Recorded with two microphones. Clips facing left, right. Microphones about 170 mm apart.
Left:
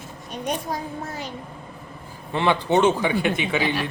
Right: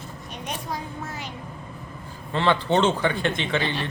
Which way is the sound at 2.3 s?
15° left (ahead or behind).